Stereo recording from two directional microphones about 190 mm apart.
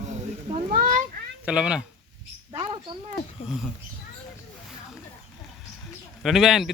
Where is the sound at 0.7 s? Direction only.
45° right (ahead or behind).